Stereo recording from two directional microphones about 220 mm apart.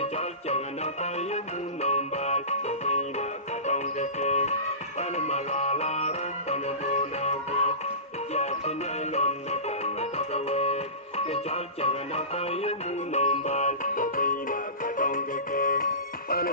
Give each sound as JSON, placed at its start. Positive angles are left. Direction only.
{"t": 0.0, "sound": "music", "side_deg": 30}